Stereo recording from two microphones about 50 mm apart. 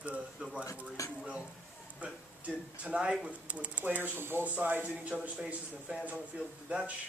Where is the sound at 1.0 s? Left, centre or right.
Left.